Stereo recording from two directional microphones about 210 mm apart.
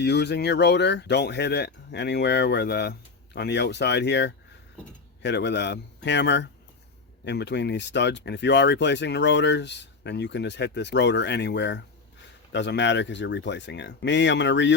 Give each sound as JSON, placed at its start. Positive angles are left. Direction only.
{"t": 0.0, "sound": "speech", "side_deg": 55}